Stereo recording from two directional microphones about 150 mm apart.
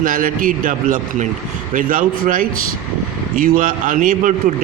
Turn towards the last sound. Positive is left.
turn(degrees=-60)  # may be behind; listen again after turning